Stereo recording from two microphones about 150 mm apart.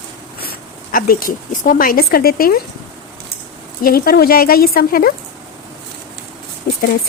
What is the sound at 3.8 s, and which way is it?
Speech, 80° left.